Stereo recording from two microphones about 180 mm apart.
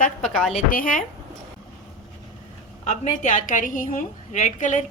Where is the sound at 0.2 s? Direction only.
Centre (ahead or behind).